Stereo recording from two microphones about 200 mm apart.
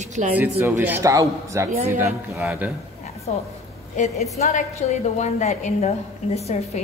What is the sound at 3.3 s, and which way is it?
A woman's voice, 35° left (ahead or behind).